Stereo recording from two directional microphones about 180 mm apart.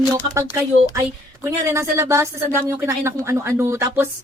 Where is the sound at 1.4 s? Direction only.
15° right (ahead or behind).